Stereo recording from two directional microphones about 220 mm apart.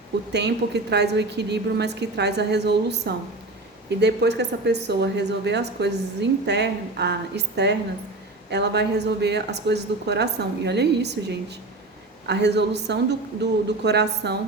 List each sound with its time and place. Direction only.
0.3 s a woman's voice: 50° right (ahead or behind)